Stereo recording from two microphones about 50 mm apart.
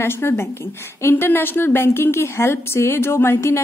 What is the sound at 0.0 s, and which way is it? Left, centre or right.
Speech, left.